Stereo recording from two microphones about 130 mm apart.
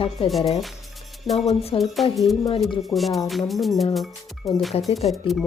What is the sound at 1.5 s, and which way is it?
Speech, 50° left (ahead or behind).